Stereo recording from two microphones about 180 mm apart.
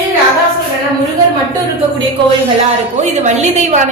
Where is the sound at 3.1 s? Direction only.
40° right (ahead or behind).